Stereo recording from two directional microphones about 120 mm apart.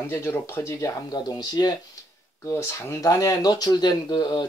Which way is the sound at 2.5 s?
25° left (ahead or behind).